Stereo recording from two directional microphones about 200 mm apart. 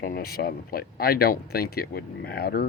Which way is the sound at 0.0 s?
50° left (ahead or behind).